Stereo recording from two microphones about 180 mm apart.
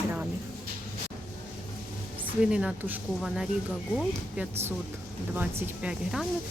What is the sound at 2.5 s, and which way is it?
Speech, 5° right (ahead or behind).